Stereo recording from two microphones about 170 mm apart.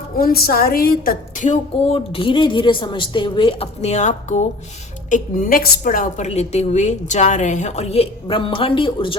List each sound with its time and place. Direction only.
0.2 s a woman's voice: 60° left (ahead or behind); by 2.0 s 45° left (ahead or behind)
2.1 s a woman's voice: 30° left (ahead or behind)
5.1 s a woman's voice: 55° left (ahead or behind); by 9.1 s 30° left (ahead or behind)